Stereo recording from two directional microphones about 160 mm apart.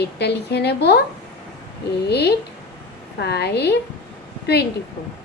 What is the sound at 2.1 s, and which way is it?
A woman's voice, 90° left.